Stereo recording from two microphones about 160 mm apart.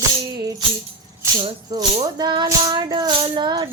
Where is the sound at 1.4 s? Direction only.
30° right (ahead or behind).